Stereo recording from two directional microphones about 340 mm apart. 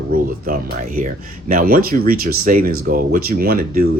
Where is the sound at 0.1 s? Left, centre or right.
Right.